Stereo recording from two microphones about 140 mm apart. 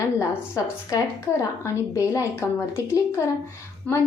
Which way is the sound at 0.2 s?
25° left (ahead or behind).